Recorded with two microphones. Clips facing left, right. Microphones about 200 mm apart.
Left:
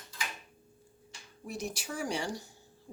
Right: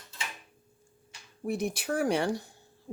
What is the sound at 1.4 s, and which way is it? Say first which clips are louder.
Speech: right 8 dB; 55° right (ahead or behind).